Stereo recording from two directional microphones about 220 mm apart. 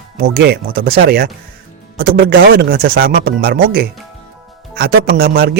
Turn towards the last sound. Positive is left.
turn(degrees=-45)  # may be behind; listen again after turning